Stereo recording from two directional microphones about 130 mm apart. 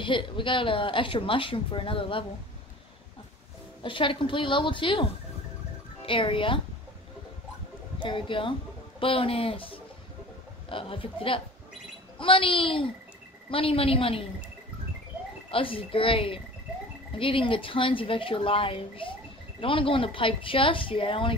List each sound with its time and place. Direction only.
0.0 s speech: 40° left (ahead or behind)
3.8 s speech: 40° left (ahead or behind)
8.0 s a woman's voice: 40° left (ahead or behind)
15.5 s a woman's voice: 45° left (ahead or behind)